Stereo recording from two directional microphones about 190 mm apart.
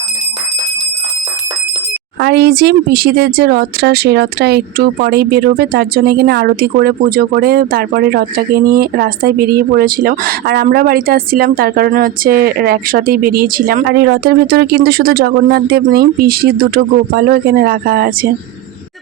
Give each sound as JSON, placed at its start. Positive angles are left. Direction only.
{"t": 2.2, "sound": "speech", "side_deg": -55}